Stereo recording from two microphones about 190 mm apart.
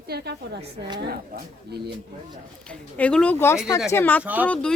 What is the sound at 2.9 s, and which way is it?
Speech, 5° left (ahead or behind).